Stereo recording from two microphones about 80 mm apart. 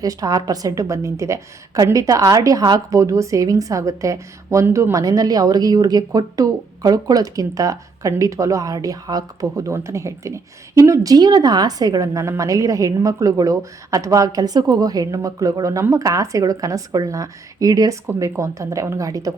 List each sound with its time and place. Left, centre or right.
0.0 s speech: right
18.0 s speech: right